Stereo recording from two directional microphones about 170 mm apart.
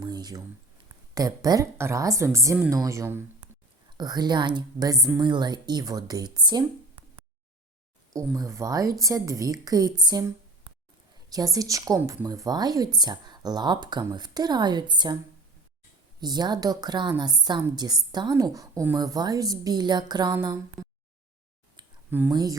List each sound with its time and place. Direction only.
0.0 s a woman's voice: 25° right (ahead or behind)
8.4 s a woman's voice: 20° right (ahead or behind)
16.2 s a woman's voice: 25° right (ahead or behind)
20.8 s a sound: centre (ahead or behind)
22.3 s a woman's voice: 25° right (ahead or behind)